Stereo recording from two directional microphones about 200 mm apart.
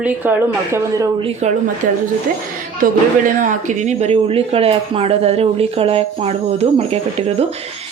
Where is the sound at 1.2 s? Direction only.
35° right (ahead or behind).